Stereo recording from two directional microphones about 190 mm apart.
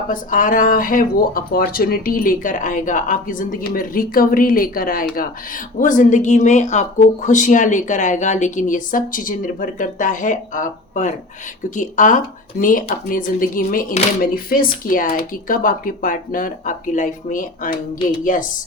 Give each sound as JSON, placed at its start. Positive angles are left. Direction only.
{"t": 0.1, "sound": "speech", "side_deg": 45}